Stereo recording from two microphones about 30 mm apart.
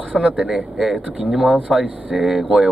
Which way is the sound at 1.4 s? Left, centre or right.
Right.